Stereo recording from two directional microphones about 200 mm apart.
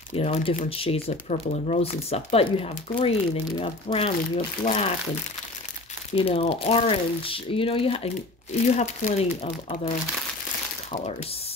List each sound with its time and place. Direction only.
0.1 s speech: 30° left (ahead or behind)
6.1 s speech: 30° left (ahead or behind)